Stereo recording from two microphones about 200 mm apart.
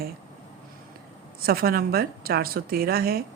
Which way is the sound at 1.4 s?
50° right (ahead or behind).